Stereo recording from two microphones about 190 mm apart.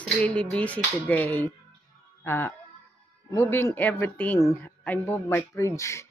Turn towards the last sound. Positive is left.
turn(degrees=15)  # may be behind; listen again after turning